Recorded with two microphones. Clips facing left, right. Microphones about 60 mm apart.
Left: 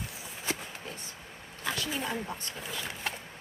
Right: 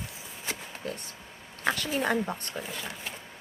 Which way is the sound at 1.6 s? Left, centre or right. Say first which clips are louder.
Right 5 dB; right.